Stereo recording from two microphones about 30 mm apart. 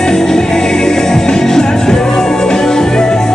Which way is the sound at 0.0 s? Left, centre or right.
Centre.